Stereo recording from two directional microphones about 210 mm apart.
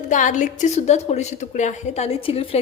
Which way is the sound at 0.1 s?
35° left (ahead or behind).